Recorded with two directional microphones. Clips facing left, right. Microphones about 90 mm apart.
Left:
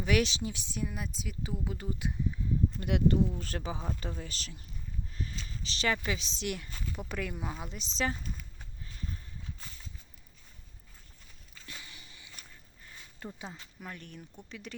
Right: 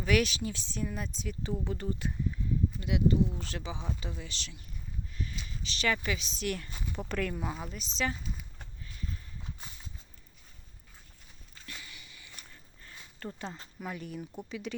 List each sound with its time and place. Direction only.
0.0 s speech: 25° left (ahead or behind)
2.8 s speech: 55° left (ahead or behind)
3.4 s speech: 45° left (ahead or behind)
5.1 s a sound: 35° left (ahead or behind)
5.5 s speech: 35° left (ahead or behind)
6.7 s speech: 20° right (ahead or behind)
7.1 s speech: 10° left (ahead or behind)
7.6 s speech: 20° left (ahead or behind)
8.1 s a sound: 5° right (ahead or behind)
11.6 s a sound: 25° left (ahead or behind)
12.4 s a sound: 15° left (ahead or behind)
13.2 s speech: 5° left (ahead or behind)
13.7 s speech: 5° right (ahead or behind)